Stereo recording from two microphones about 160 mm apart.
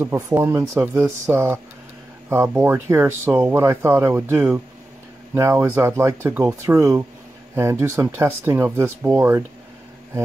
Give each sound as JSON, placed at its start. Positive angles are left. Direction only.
{"t": 0.0, "sound": "speech", "side_deg": -15}